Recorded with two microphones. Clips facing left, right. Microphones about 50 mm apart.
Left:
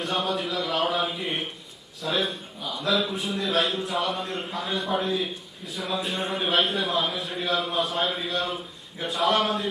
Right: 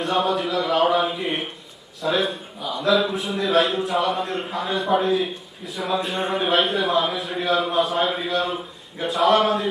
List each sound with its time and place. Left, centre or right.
0.0 s a man's voice: centre